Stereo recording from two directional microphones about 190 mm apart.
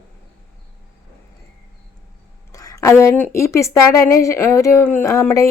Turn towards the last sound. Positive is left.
turn(degrees=15)  # may be behind; listen again after turning